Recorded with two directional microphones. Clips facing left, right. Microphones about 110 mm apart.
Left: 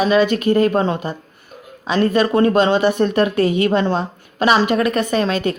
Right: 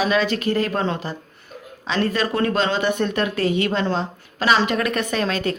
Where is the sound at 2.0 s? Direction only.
25° left (ahead or behind).